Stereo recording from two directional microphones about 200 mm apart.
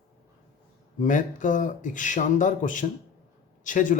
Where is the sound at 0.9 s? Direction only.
40° left (ahead or behind).